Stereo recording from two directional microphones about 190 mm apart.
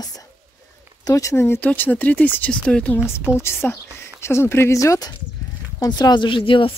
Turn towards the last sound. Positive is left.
turn(degrees=25)  # may be behind; listen again after turning